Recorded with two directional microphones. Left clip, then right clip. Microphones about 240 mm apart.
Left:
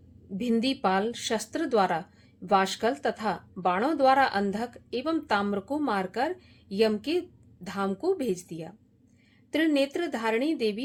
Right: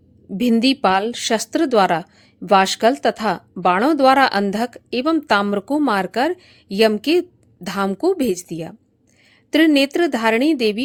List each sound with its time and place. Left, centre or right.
0.3 s a woman's voice: right